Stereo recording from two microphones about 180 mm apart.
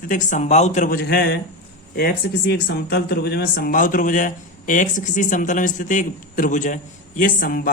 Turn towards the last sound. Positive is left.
turn(degrees=50)  # may be behind; listen again after turning